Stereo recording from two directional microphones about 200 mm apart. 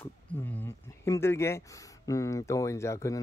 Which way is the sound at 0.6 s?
15° left (ahead or behind).